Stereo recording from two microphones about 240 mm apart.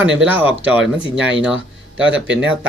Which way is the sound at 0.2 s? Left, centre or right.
Centre.